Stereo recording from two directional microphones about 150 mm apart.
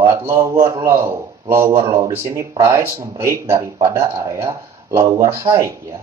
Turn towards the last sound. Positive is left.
turn(degrees=-20)  # may be behind; listen again after turning